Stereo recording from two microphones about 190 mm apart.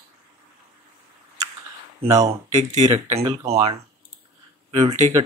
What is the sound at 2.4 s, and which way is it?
Speech, 35° right (ahead or behind).